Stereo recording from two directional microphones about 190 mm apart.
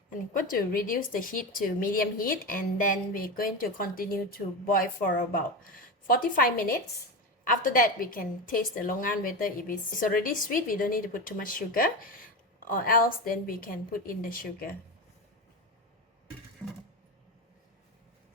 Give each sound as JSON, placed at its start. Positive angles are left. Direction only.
{"t": 0.3, "sound": "a woman's voice", "side_deg": 50}